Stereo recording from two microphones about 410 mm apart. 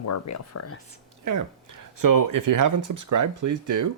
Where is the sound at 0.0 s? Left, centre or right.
Left.